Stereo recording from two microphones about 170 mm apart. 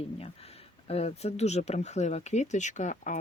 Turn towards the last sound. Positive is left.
turn(degrees=45)  # may be behind; listen again after turning